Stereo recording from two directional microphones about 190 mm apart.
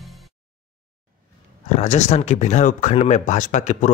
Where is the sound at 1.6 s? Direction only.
40° left (ahead or behind).